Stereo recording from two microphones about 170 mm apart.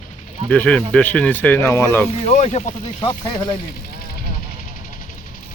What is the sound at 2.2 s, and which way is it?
Speech, 40° left (ahead or behind).